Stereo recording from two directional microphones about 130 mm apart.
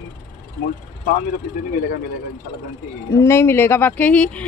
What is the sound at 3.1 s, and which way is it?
Speech, 20° left (ahead or behind).